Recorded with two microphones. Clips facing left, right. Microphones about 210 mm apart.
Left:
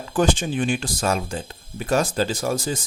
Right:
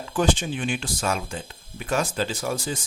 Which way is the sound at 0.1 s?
45° left (ahead or behind).